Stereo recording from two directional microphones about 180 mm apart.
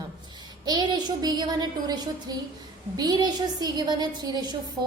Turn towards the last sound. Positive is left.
turn(degrees=-25)  # may be behind; listen again after turning